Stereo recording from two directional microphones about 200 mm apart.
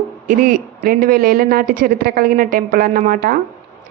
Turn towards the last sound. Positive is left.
turn(degrees=-45)  # may be behind; listen again after turning